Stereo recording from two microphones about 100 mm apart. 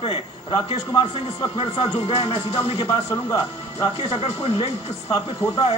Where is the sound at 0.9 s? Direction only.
55° left (ahead or behind).